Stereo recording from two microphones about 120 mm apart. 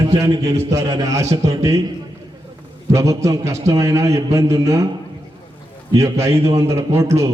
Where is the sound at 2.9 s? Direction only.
25° right (ahead or behind).